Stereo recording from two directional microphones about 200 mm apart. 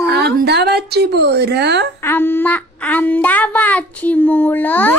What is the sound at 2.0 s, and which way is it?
Child singing, 10° left (ahead or behind).